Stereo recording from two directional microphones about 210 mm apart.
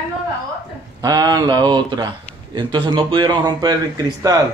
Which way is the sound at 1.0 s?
15° right (ahead or behind).